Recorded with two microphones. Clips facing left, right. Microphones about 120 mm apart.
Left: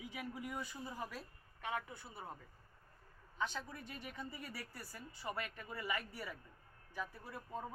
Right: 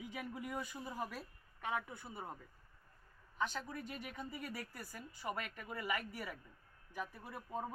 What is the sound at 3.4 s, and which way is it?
Speech, 10° right (ahead or behind).